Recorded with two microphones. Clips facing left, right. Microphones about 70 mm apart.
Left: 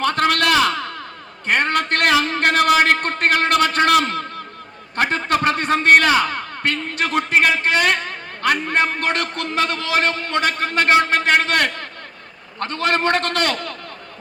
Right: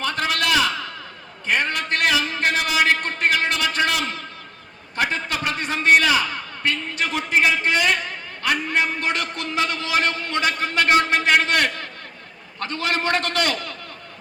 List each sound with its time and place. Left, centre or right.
0.0 s a sound: left
1.5 s a man's voice: left
7.5 s a man's voice: left
7.8 s a man's voice: left